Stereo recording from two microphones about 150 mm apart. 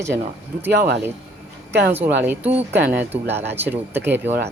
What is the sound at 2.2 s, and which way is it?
Speech, 10° right (ahead or behind).